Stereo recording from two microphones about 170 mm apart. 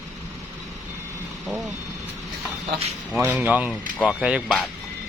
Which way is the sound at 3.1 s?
10° right (ahead or behind).